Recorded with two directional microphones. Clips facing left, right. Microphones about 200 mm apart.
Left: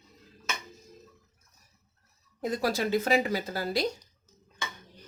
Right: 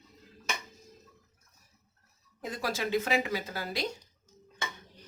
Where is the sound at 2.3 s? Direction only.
40° left (ahead or behind).